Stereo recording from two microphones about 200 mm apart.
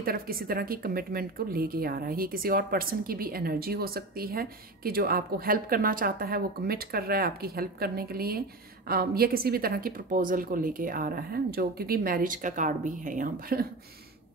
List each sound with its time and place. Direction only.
0.0 s a woman's voice: 50° right (ahead or behind)